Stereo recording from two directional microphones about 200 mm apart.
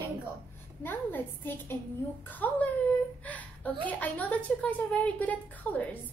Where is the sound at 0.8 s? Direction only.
10° left (ahead or behind).